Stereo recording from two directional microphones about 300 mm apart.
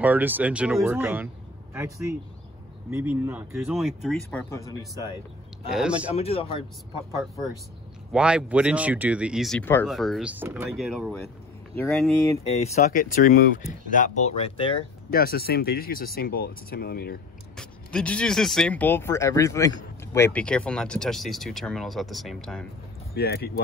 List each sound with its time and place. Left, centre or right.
0.0 s speech: centre
2.9 s speech: centre
5.7 s speech: centre
6.1 s speech: centre
8.1 s speech: centre
12.4 s speech: left
15.0 s speech: left
17.6 s speech: centre
23.1 s speech: left